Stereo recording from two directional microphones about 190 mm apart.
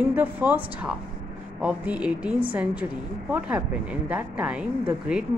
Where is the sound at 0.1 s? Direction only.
10° right (ahead or behind).